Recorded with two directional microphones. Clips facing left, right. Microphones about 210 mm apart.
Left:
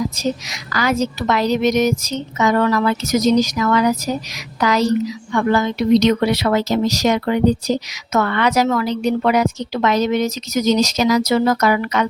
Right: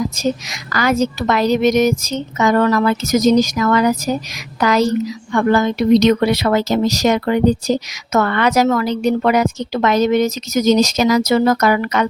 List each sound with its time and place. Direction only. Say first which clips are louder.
0.2 s a woman's voice: right 2 dB; 50° right (ahead or behind)